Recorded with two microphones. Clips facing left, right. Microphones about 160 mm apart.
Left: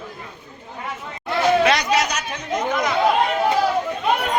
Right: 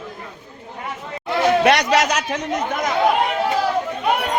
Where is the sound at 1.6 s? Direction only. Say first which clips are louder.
Right 3 dB; 75° right (ahead or behind).